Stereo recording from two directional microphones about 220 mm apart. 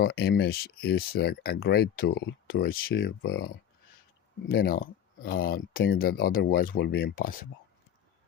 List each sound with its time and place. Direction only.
0.0 s speech: 45° left (ahead or behind)